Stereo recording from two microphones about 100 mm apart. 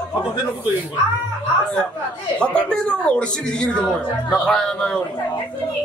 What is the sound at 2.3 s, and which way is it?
A man's voice, 10° left (ahead or behind).